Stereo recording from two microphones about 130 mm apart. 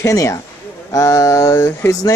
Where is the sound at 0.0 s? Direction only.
25° left (ahead or behind).